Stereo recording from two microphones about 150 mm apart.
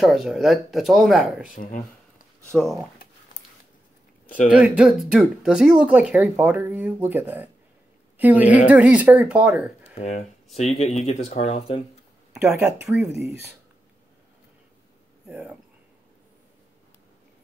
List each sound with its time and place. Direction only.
0.0 s speech: centre (ahead or behind)
1.5 s speech: 65° left (ahead or behind)
2.5 s speech: centre (ahead or behind)
4.5 s speech: 5° right (ahead or behind)
9.9 s speech: 45° left (ahead or behind)
12.4 s speech: 5° right (ahead or behind)
12.9 s speech: 15° right (ahead or behind)
15.2 s speech: 10° right (ahead or behind)